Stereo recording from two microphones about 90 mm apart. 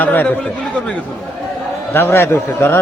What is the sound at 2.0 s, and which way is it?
Speech, 25° left (ahead or behind).